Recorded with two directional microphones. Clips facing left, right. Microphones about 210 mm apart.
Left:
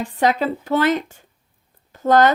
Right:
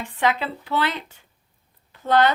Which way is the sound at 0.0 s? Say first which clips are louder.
Left 5 dB; 40° left (ahead or behind).